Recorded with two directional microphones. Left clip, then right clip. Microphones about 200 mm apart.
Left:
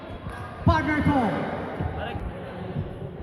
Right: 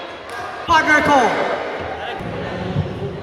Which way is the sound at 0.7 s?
25° right (ahead or behind).